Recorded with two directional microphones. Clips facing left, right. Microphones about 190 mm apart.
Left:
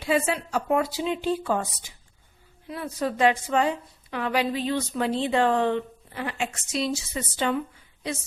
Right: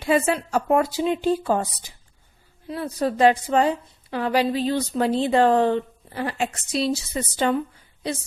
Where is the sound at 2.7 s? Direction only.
35° right (ahead or behind).